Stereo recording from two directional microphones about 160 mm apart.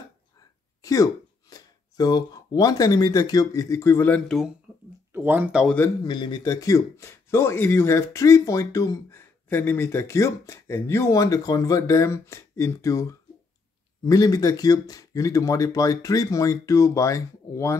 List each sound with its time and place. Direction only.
0.8 s speech: 20° left (ahead or behind)
4.7 s a sound: 5° right (ahead or behind)
5.1 s speech: 10° right (ahead or behind)
6.0 s speech: 25° left (ahead or behind)